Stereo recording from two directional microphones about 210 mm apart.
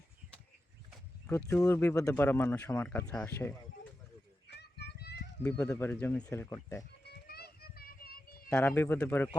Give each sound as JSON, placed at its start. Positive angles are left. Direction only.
{"t": 1.5, "sound": "speech", "side_deg": 5}
{"t": 4.4, "sound": "a sound", "side_deg": 50}
{"t": 5.4, "sound": "speech", "side_deg": 5}
{"t": 7.0, "sound": "children playing", "side_deg": 50}
{"t": 8.4, "sound": "speech", "side_deg": 10}